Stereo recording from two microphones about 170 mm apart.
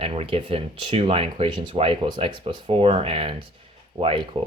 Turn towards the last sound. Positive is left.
turn(degrees=-30)  # may be behind; listen again after turning